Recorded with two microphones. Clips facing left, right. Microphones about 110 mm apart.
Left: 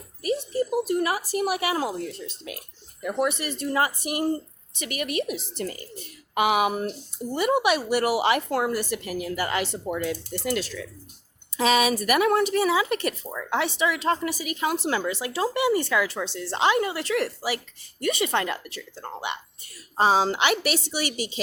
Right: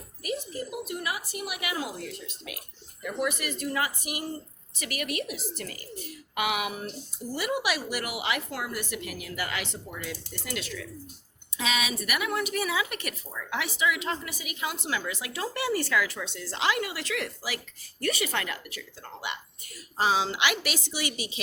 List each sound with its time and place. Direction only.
0.2 s a woman's voice: 30° left (ahead or behind)
4.8 s a woman's voice: 25° left (ahead or behind)
9.8 s a woman's voice: 50° left (ahead or behind)
12.5 s a woman's voice: 30° left (ahead or behind)